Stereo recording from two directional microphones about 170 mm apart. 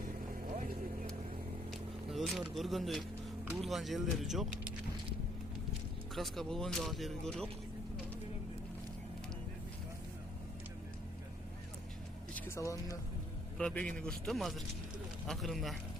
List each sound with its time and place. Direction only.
1.7 s vehicle: centre (ahead or behind)
2.6 s speech: centre (ahead or behind)
6.1 s speech: centre (ahead or behind)
12.3 s speech: 15° left (ahead or behind)
13.6 s speech: 5° left (ahead or behind)